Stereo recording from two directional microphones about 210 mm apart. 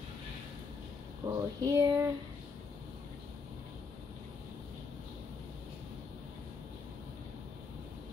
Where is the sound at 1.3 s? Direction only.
20° right (ahead or behind).